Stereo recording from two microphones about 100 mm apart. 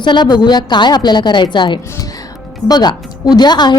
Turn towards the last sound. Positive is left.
turn(degrees=45)  # may be behind; listen again after turning